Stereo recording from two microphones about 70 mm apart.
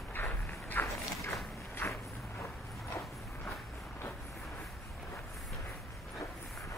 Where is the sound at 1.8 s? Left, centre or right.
Left.